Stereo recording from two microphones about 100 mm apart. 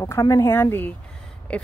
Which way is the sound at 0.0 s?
35° left (ahead or behind).